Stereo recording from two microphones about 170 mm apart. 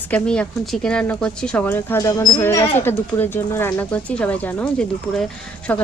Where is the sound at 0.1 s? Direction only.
5° left (ahead or behind).